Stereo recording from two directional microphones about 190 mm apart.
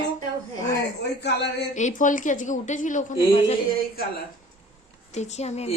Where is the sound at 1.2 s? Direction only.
60° left (ahead or behind).